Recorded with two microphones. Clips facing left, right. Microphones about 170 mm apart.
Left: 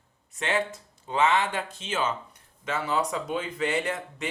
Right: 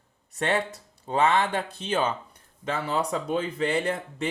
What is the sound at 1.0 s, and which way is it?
Speech, 35° right (ahead or behind).